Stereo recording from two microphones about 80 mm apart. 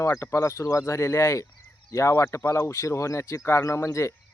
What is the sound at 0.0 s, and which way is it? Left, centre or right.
Speech, left.